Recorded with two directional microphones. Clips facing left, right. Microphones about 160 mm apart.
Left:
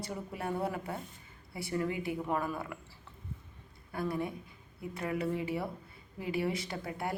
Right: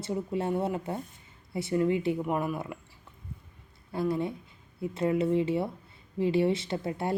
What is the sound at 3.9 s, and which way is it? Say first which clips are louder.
Speech: right 5 dB; 25° right (ahead or behind).